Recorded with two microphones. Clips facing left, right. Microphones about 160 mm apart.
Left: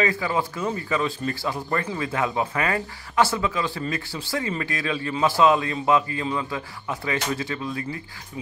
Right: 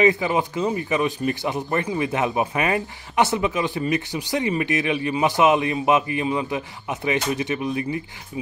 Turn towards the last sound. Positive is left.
turn(degrees=-20)  # may be behind; listen again after turning